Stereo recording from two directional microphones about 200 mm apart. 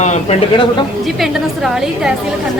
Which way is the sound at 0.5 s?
25° left (ahead or behind).